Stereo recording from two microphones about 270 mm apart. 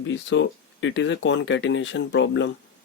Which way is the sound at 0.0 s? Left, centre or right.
Left.